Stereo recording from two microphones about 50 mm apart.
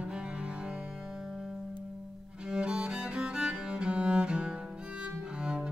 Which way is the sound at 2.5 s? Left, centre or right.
Centre.